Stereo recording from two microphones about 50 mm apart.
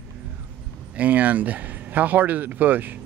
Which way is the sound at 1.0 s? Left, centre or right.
Right.